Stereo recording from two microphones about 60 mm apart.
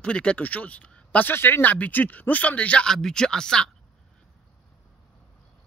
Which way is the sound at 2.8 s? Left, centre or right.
Centre.